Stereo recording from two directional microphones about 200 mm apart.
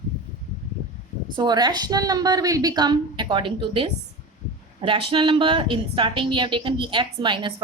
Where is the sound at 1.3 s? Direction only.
20° right (ahead or behind).